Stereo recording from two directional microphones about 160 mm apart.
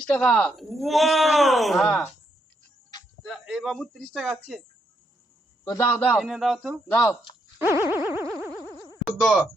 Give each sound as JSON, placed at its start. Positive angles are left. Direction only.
{"t": 0.0, "sound": "speech", "side_deg": 5}
{"t": 3.2, "sound": "speech", "side_deg": 0}
{"t": 5.6, "sound": "a man's voice", "side_deg": 25}
{"t": 6.0, "sound": "a man's voice", "side_deg": 10}
{"t": 6.2, "sound": "speech", "side_deg": 0}
{"t": 7.6, "sound": "boing", "side_deg": -15}
{"t": 8.7, "sound": "music", "side_deg": 20}
{"t": 9.1, "sound": "speech", "side_deg": 0}